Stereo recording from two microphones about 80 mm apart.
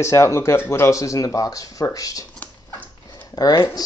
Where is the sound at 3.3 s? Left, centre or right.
Left.